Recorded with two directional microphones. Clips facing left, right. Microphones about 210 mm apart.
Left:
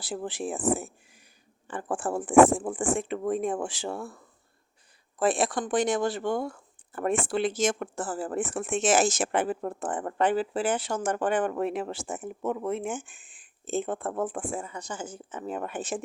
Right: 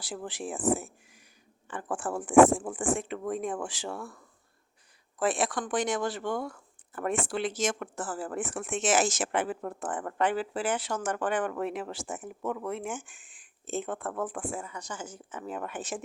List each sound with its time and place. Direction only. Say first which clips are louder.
0.0 s speech: left 4 dB; 25° left (ahead or behind)
5.2 s speech: left 3 dB; 30° left (ahead or behind)